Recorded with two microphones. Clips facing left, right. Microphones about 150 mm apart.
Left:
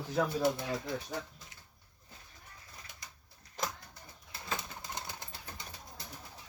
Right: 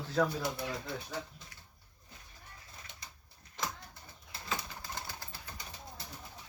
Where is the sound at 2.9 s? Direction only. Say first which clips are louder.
Even; 25° right (ahead or behind).